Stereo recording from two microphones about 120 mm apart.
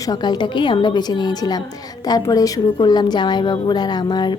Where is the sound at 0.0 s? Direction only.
35° left (ahead or behind).